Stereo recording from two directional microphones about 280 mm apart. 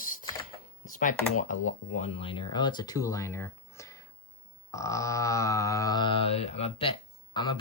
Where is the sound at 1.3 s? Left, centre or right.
Left.